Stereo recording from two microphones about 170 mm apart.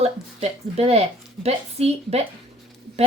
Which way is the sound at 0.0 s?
35° right (ahead or behind).